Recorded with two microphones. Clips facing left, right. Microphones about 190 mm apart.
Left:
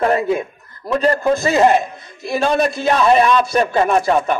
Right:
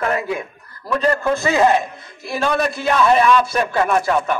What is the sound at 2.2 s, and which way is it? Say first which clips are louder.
A man's voice: left 3 dB; 20° left (ahead or behind).